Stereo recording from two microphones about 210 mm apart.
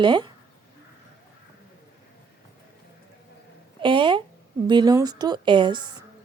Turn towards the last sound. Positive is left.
turn(degrees=-20)  # may be behind; listen again after turning